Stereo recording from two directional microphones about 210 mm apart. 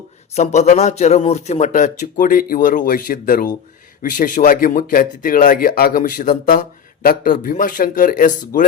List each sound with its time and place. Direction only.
0.3 s speech: 35° left (ahead or behind)